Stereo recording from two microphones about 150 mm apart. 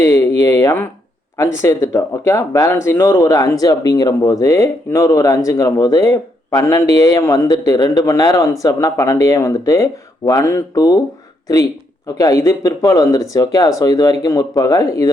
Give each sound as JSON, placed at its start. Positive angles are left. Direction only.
{"t": 0.6, "sound": "speech", "side_deg": 20}